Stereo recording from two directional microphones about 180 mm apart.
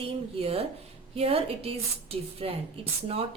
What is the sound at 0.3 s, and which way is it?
A woman's voice, 35° right (ahead or behind).